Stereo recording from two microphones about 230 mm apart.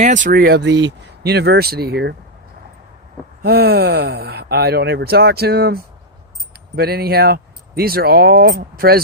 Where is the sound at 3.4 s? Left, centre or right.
Right.